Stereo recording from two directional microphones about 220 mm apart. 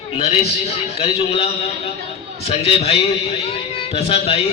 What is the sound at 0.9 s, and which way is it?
Speech, 25° left (ahead or behind).